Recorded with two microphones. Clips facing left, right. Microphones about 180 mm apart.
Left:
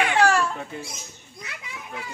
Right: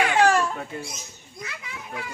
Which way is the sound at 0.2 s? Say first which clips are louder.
Right 1 dB; 20° right (ahead or behind).